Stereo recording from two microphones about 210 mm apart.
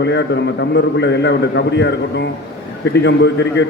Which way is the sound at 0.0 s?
55° left (ahead or behind).